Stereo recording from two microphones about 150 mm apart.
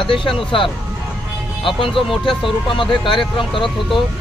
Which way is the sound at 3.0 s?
35° left (ahead or behind).